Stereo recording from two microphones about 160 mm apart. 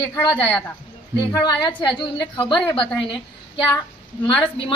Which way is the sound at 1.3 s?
30° left (ahead or behind).